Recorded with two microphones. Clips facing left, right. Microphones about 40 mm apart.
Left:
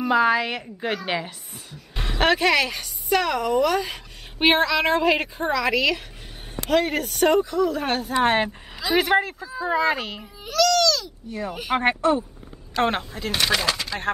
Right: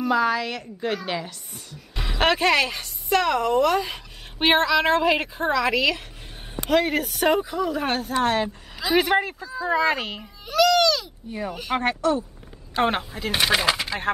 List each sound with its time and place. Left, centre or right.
0.0 s a woman's voice: centre
1.5 s a woman's voice: centre
8.2 s a woman's voice: left
8.7 s a woman's voice: centre
9.4 s a woman's voice: centre
10.5 s speech: centre
11.4 s a woman's voice: centre
11.8 s a woman's voice: left
12.8 s a woman's voice: centre
13.3 s speech: centre